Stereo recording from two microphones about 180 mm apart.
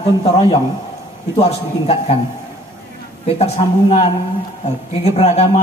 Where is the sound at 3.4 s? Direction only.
35° left (ahead or behind).